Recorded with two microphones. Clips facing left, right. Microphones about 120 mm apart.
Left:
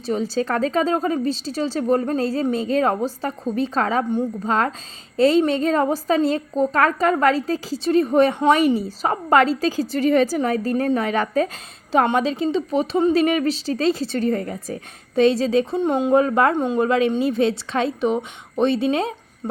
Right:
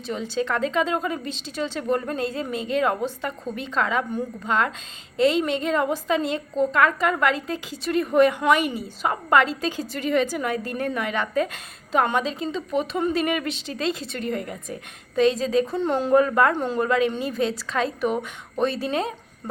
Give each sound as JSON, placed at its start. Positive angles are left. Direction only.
{"t": 0.0, "sound": "a woman's voice", "side_deg": 35}
{"t": 15.8, "sound": "a woman's voice", "side_deg": 15}